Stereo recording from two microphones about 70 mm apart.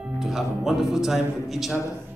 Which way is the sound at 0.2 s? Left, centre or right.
Centre.